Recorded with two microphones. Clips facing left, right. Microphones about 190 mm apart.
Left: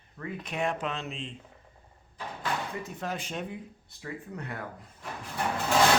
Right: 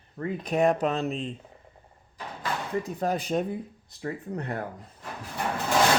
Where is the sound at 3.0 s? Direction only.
35° right (ahead or behind).